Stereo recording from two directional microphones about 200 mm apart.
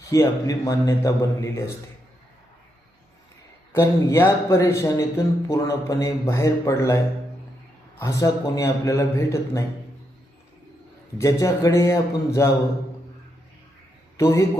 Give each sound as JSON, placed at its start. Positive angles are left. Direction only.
{"t": 0.1, "sound": "a man's voice", "side_deg": 15}
{"t": 3.7, "sound": "a man's voice", "side_deg": 10}
{"t": 11.2, "sound": "a man's voice", "side_deg": 15}
{"t": 14.2, "sound": "a man's voice", "side_deg": 15}